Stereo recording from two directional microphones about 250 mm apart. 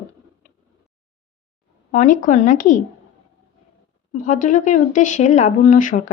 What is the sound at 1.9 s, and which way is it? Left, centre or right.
Speech, left.